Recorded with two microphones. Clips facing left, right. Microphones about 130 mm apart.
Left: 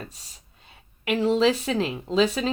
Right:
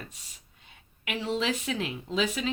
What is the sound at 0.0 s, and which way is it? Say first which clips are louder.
Speech: left 5 dB; 35° left (ahead or behind).